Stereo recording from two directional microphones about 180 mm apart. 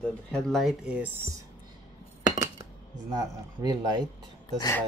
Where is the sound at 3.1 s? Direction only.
20° right (ahead or behind).